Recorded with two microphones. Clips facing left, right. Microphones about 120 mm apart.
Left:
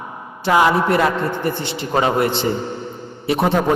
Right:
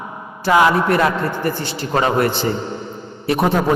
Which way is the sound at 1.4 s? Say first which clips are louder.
Even; 25° left (ahead or behind).